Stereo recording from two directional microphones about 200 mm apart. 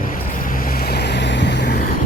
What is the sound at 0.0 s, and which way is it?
Boat, 45° left (ahead or behind).